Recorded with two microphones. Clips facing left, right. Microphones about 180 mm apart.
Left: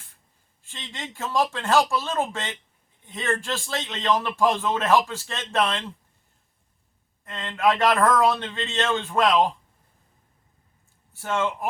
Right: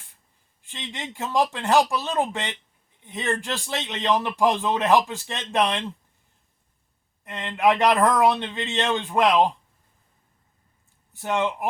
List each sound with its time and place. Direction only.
0.6 s a man's voice: 15° right (ahead or behind)
7.3 s a man's voice: 15° right (ahead or behind)
11.1 s a man's voice: 15° right (ahead or behind)